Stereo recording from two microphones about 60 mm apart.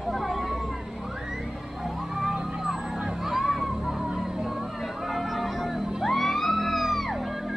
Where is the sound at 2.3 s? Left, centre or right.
Centre.